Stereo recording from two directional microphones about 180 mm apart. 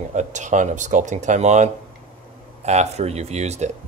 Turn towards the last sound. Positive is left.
turn(degrees=-40)  # may be behind; listen again after turning